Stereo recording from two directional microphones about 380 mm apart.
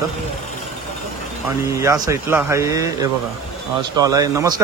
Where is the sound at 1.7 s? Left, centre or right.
Centre.